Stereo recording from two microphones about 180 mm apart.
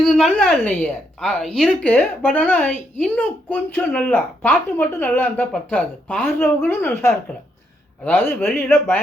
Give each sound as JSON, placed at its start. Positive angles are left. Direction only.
{"t": 0.0, "sound": "a woman's voice", "side_deg": 0}